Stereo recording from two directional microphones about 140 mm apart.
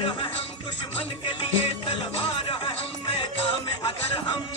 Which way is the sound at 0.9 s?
35° left (ahead or behind).